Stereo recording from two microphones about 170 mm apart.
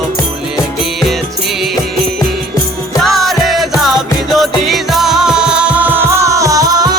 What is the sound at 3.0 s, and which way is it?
Music, centre (ahead or behind).